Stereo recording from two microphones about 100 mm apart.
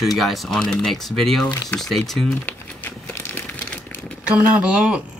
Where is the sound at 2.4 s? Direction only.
20° left (ahead or behind).